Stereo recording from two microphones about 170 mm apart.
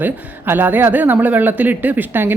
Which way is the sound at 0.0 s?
10° right (ahead or behind).